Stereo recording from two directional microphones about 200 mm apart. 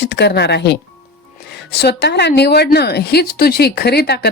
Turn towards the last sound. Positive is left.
turn(degrees=55)  # may be behind; listen again after turning